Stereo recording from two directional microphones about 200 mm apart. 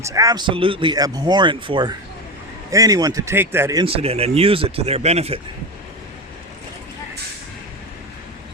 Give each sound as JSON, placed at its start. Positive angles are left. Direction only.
{"t": 0.0, "sound": "speech", "side_deg": -15}
{"t": 3.8, "sound": "speech", "side_deg": -30}